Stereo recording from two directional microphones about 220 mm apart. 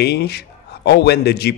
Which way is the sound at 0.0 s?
50° left (ahead or behind).